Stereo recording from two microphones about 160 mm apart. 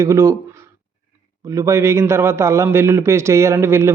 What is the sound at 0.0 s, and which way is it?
A man's voice, 20° right (ahead or behind).